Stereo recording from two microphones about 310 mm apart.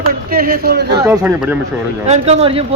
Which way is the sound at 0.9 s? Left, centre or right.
Centre.